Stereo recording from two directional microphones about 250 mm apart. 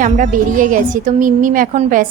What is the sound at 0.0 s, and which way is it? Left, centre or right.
A woman's voice, right.